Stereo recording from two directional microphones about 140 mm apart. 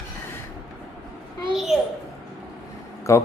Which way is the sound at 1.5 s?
5° right (ahead or behind).